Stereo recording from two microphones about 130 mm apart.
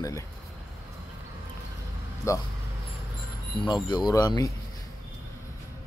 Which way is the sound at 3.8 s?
35° left (ahead or behind).